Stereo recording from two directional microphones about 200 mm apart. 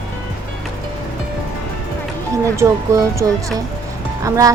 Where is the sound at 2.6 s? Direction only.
15° right (ahead or behind).